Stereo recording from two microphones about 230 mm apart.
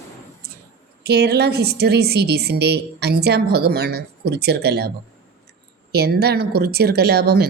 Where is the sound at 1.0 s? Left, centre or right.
Right.